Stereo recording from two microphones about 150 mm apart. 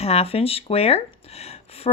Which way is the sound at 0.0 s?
45° left (ahead or behind).